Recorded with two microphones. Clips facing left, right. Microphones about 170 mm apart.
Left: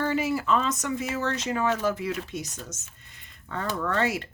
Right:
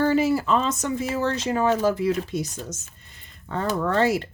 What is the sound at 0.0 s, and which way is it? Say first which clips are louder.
Speech: right 6 dB; 35° right (ahead or behind).